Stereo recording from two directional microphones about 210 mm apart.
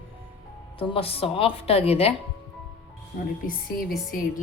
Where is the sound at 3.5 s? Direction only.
45° left (ahead or behind).